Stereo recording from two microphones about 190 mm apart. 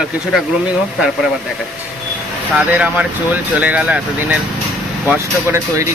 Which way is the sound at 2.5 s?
5° right (ahead or behind).